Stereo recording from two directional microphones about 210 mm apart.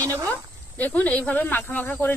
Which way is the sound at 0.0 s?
15° right (ahead or behind).